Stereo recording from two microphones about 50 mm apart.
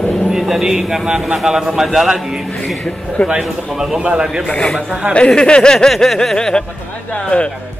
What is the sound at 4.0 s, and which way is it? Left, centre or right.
Speech, centre.